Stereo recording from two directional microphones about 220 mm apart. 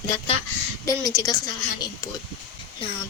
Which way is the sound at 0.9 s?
15° left (ahead or behind).